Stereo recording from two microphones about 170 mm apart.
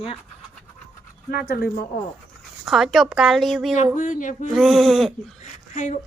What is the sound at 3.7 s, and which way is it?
Speech, 50° left (ahead or behind).